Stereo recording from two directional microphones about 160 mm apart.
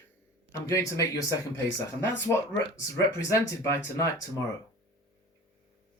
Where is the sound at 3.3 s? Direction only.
20° left (ahead or behind).